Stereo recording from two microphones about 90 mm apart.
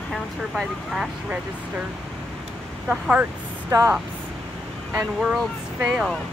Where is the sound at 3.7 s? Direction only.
35° right (ahead or behind).